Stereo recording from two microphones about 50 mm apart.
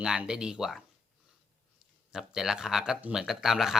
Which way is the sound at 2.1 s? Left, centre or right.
Centre.